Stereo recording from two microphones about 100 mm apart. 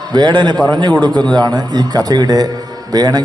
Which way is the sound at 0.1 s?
50° right (ahead or behind).